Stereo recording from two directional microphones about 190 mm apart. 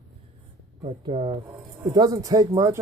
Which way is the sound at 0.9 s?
30° right (ahead or behind).